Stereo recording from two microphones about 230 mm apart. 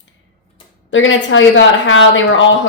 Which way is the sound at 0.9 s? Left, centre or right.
Left.